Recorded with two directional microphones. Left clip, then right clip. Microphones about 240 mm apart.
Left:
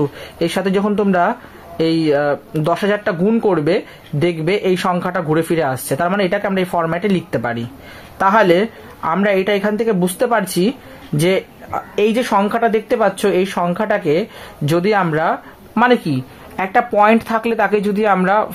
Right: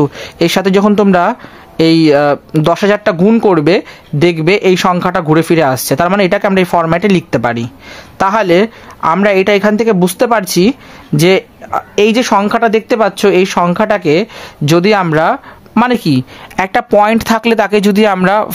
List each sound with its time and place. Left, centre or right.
0.0 s speech: right